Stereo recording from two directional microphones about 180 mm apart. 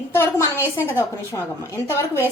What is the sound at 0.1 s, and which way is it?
A woman's voice, 15° left (ahead or behind).